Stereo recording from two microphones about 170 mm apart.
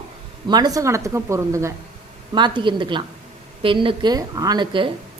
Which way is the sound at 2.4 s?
25° right (ahead or behind).